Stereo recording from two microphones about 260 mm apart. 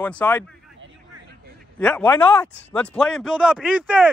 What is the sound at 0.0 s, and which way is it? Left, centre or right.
A man's voice, centre.